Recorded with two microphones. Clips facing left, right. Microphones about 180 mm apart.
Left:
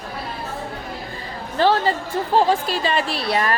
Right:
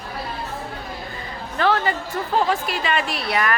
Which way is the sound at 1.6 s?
30° left (ahead or behind).